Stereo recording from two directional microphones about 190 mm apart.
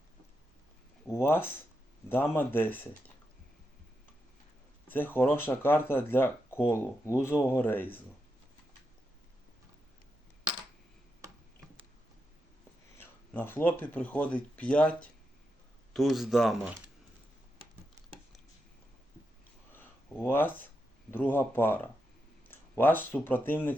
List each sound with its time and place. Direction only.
1.0 s speech: 15° left (ahead or behind)
4.9 s speech: 10° left (ahead or behind)
13.0 s speech: 10° left (ahead or behind)
19.7 s a sound: 10° left (ahead or behind)
21.1 s speech: 10° left (ahead or behind)